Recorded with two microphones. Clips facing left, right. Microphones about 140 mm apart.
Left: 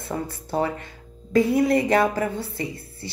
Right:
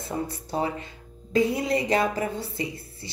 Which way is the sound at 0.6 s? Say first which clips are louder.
Left 2 dB; 25° right (ahead or behind).